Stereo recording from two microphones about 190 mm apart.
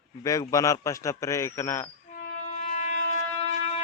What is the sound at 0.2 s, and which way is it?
Speech, 15° left (ahead or behind).